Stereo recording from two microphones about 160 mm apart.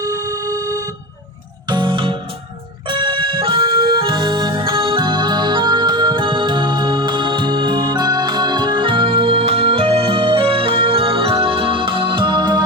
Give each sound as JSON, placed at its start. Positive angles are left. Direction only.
{"t": 0.0, "sound": "music", "side_deg": -25}
{"t": 2.9, "sound": "organ", "side_deg": -30}